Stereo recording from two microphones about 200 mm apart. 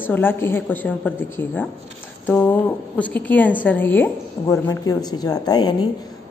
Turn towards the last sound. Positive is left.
turn(degrees=20)  # may be behind; listen again after turning